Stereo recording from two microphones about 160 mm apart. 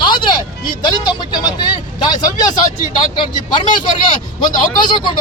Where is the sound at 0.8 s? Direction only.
25° left (ahead or behind).